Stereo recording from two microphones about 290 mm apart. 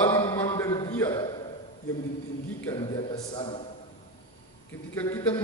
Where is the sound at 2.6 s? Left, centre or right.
Centre.